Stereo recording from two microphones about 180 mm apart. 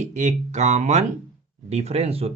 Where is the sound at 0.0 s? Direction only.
40° right (ahead or behind).